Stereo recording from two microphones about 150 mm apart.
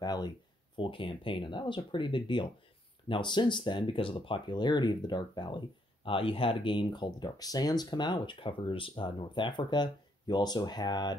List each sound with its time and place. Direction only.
0.0 s speech: 30° left (ahead or behind)